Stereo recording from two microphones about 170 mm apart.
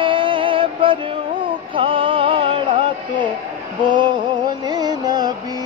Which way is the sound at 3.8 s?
25° right (ahead or behind).